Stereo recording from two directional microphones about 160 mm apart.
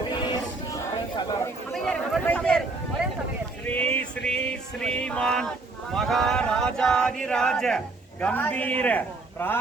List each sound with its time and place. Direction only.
0.1 s a sound: 30° left (ahead or behind)
1.7 s chatter: 5° left (ahead or behind)
3.7 s music: 10° left (ahead or behind)
5.9 s a man's voice: centre (ahead or behind)